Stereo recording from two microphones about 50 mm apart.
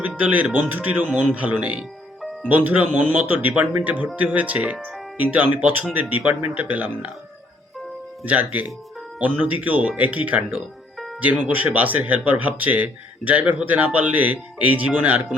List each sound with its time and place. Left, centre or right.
0.2 s speech: right
8.2 s speech: right
10.9 s music: centre
11.2 s speech: right